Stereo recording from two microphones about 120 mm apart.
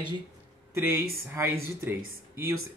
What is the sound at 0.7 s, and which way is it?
Speech, 20° right (ahead or behind).